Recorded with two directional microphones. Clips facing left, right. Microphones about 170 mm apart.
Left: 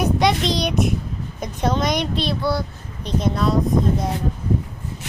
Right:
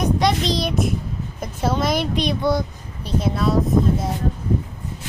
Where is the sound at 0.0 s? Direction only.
Centre (ahead or behind).